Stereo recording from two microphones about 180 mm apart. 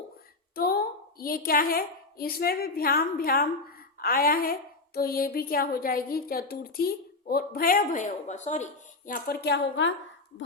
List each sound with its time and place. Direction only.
0.5 s a woman's voice: 55° left (ahead or behind); by 9.9 s 80° left